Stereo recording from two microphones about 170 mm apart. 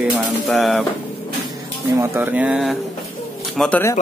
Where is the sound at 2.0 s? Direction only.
10° right (ahead or behind).